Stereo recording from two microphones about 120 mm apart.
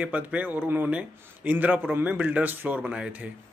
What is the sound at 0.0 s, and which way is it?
Speech, 10° right (ahead or behind).